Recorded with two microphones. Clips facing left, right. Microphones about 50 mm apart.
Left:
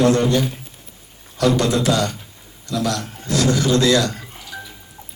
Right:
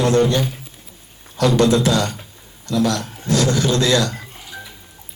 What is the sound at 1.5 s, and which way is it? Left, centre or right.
Speech, right.